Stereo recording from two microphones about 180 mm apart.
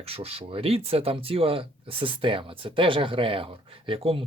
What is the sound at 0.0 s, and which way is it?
Speech, 35° right (ahead or behind).